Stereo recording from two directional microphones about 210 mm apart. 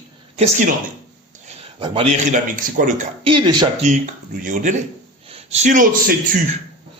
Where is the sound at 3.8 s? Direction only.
40° right (ahead or behind).